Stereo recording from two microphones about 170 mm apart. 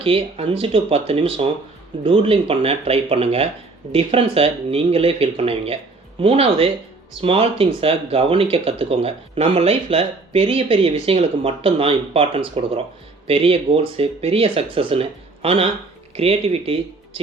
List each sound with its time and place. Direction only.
0.0 s speech: 35° right (ahead or behind)